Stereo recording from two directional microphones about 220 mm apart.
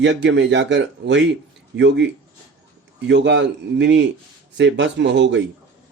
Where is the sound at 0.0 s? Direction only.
55° right (ahead or behind).